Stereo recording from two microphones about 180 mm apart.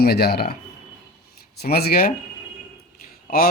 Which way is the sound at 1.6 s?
60° left (ahead or behind).